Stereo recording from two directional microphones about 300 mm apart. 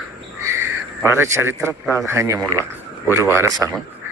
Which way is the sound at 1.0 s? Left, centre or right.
Centre.